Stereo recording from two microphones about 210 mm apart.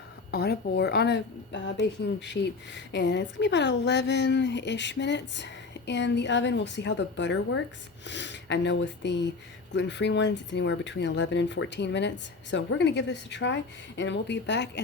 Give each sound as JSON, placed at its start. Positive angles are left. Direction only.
{"t": 0.3, "sound": "a woman's voice", "side_deg": 50}